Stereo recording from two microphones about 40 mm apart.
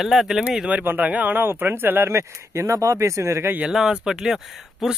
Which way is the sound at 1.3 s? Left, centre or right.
Right.